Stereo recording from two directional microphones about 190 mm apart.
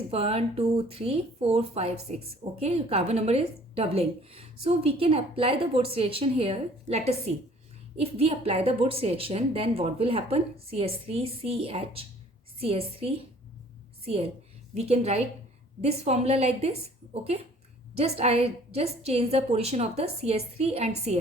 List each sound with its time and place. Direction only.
0.1 s a woman's voice: 30° right (ahead or behind)
17.9 s speech: 35° right (ahead or behind)